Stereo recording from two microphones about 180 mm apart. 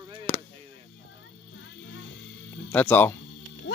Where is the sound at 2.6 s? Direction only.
10° left (ahead or behind).